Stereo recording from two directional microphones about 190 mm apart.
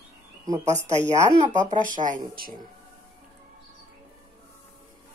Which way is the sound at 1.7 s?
45° right (ahead or behind).